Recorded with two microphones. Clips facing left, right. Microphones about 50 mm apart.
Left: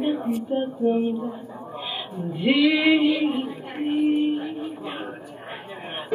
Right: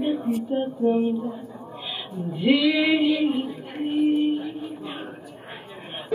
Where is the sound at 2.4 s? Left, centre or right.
Left.